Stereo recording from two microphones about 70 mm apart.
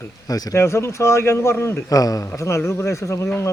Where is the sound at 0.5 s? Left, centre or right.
Left.